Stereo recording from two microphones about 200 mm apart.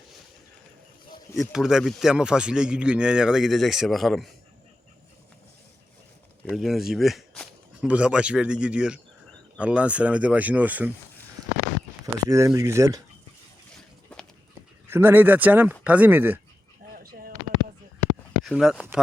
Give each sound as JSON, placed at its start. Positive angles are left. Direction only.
{"t": 1.4, "sound": "a man's voice", "side_deg": -5}
{"t": 6.4, "sound": "speech", "side_deg": 0}
{"t": 12.0, "sound": "speech", "side_deg": -15}
{"t": 14.8, "sound": "speech", "side_deg": -10}
{"t": 16.9, "sound": "a sound", "side_deg": -45}
{"t": 18.4, "sound": "a man's voice", "side_deg": 0}